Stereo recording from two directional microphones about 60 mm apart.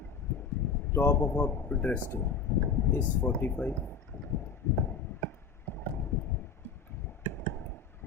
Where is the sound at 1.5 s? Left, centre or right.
Left.